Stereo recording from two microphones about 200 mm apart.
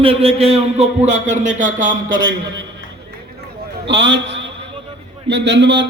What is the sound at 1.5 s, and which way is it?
Speech, 65° right (ahead or behind).